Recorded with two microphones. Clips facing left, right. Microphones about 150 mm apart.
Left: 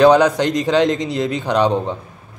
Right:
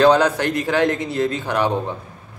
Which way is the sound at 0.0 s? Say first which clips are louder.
Left 3 dB; 15° left (ahead or behind).